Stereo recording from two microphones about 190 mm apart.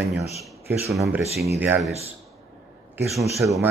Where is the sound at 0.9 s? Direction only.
Centre (ahead or behind).